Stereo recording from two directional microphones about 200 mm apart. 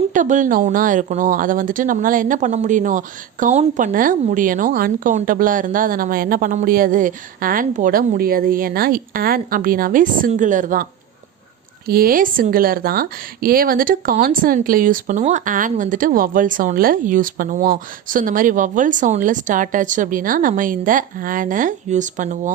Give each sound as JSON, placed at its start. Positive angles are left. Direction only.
{"t": 0.1, "sound": "speech", "side_deg": -40}
{"t": 11.9, "sound": "speech", "side_deg": -50}